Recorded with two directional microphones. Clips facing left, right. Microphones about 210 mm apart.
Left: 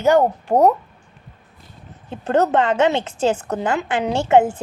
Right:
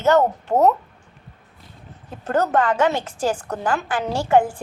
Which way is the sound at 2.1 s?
25° left (ahead or behind).